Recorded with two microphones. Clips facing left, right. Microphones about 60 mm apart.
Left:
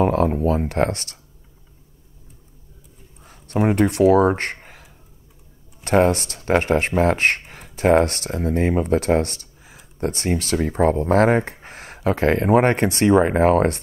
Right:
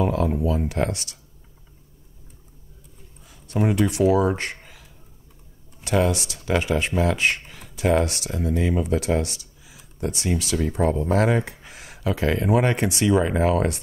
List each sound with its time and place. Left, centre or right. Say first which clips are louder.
0.0 s speech: left 4 dB; left
3.3 s speech: left 3 dB; left
5.9 s speech: left 5 dB; left